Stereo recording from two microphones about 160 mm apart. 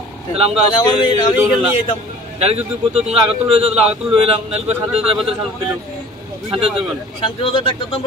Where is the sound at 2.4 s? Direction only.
40° right (ahead or behind).